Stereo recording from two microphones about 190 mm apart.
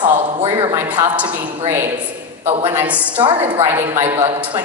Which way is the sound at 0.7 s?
10° right (ahead or behind).